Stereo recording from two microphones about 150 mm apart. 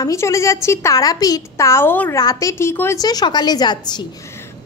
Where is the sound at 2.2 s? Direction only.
25° left (ahead or behind).